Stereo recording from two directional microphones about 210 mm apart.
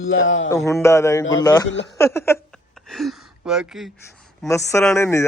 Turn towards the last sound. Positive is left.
turn(degrees=15)  # may be behind; listen again after turning